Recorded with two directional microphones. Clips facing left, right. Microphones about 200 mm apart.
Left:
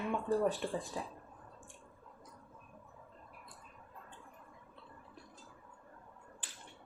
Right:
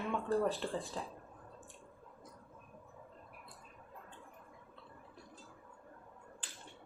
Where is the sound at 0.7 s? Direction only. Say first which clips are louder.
Left 1 dB; 15° left (ahead or behind).